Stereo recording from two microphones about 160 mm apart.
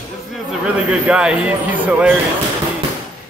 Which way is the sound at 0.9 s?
5° right (ahead or behind).